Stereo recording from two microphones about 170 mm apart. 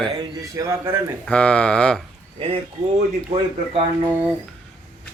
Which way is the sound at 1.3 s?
5° left (ahead or behind).